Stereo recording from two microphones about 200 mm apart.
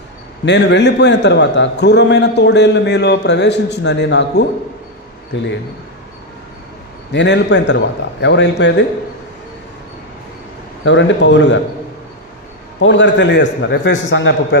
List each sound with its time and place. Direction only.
0.5 s a man's voice: 60° left (ahead or behind)
7.1 s a man's voice: 60° left (ahead or behind)
10.9 s a man's voice: 65° left (ahead or behind)
12.8 s a man's voice: 65° left (ahead or behind)